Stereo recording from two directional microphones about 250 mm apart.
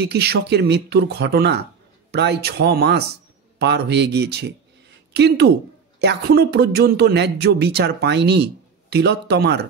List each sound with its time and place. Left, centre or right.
0.0 s speech: right